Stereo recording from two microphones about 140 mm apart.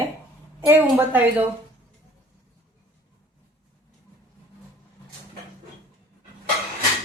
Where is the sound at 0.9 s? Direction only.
15° right (ahead or behind).